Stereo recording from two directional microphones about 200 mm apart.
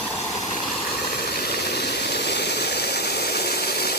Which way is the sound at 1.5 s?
55° left (ahead or behind).